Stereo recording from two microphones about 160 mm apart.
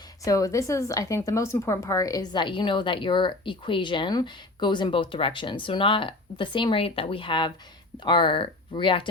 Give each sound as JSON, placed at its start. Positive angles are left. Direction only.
{"t": 0.3, "sound": "a woman's voice", "side_deg": 20}